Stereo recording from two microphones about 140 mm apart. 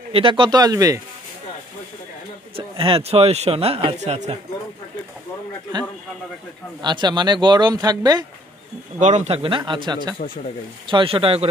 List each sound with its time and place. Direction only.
0.1 s speech: 35° right (ahead or behind)
2.5 s a man's voice: 40° right (ahead or behind)
6.8 s speech: 30° right (ahead or behind)
9.0 s speech: 55° right (ahead or behind)